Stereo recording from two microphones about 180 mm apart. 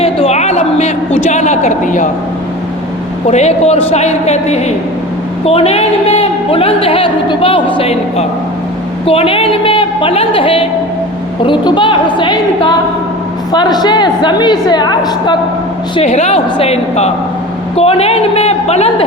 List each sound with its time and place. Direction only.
0.0 s a sound: 35° left (ahead or behind)
3.2 s a woman's voice: 40° left (ahead or behind); by 15.4 s 25° left (ahead or behind)
16.0 s a woman's voice: 35° left (ahead or behind)